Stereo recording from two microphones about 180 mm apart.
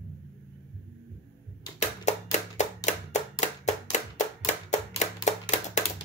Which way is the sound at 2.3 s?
40° left (ahead or behind).